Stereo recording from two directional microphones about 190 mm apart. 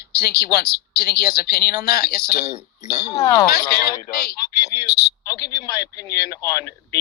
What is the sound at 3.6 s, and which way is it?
A man's voice, 20° left (ahead or behind).